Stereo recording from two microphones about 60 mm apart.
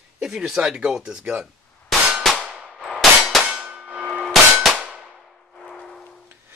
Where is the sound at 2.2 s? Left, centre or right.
Centre.